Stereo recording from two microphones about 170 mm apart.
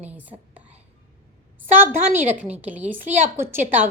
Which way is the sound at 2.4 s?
10° right (ahead or behind).